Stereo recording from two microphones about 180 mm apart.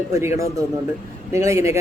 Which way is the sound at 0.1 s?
15° right (ahead or behind).